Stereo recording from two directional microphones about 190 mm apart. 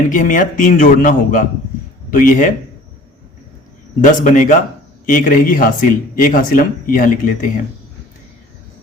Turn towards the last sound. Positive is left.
turn(degrees=45)  # may be behind; listen again after turning